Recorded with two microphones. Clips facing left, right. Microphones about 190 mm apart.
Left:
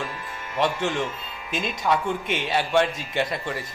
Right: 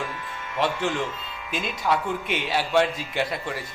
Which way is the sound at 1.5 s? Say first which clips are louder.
Left 2 dB; 45° left (ahead or behind).